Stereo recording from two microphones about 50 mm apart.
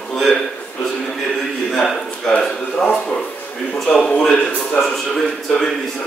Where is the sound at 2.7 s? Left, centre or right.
Centre.